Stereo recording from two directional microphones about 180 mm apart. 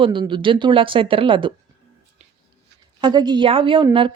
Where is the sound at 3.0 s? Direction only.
25° right (ahead or behind).